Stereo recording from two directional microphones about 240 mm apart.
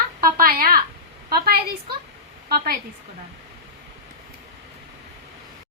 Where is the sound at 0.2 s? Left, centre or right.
Right.